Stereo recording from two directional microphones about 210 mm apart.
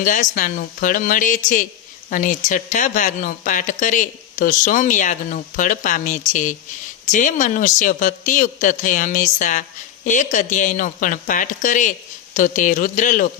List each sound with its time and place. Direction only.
0.0 s speech: 40° left (ahead or behind)